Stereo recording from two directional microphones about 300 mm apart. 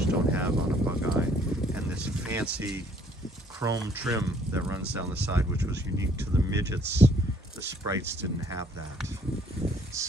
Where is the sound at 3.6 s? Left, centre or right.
Centre.